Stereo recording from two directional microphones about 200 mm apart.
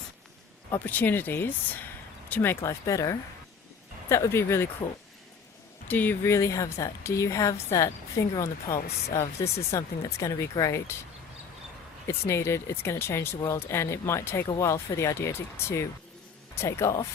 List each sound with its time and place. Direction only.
0.7 s speech: 10° left (ahead or behind)
5.9 s speech: 10° left (ahead or behind)
12.0 s speech: 15° left (ahead or behind)